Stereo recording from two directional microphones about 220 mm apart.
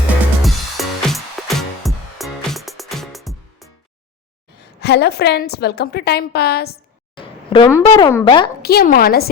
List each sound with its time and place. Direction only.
0.4 s music: centre (ahead or behind)
4.8 s a woman's voice: 50° left (ahead or behind)
7.2 s a sound: 20° left (ahead or behind)
7.8 s speech: 20° left (ahead or behind)
8.6 s a woman's voice: 45° left (ahead or behind)